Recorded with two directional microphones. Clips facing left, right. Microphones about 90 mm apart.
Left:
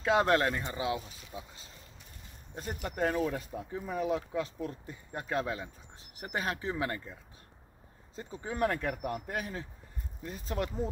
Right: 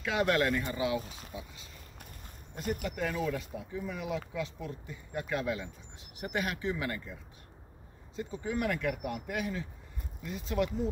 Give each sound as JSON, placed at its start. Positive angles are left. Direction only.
{"t": 0.0, "sound": "speech", "side_deg": 35}
{"t": 1.0, "sound": "speech", "side_deg": -45}
{"t": 1.3, "sound": "speech", "side_deg": 35}
{"t": 2.8, "sound": "speech", "side_deg": 45}
{"t": 8.4, "sound": "speech", "side_deg": 35}